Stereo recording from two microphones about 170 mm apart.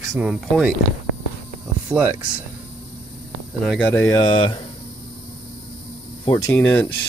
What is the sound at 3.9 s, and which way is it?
Speech, 15° left (ahead or behind).